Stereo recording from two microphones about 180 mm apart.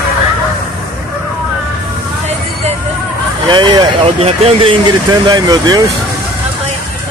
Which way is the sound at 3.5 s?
25° right (ahead or behind).